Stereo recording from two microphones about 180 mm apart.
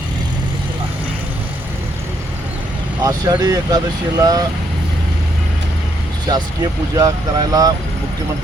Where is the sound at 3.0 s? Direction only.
20° right (ahead or behind).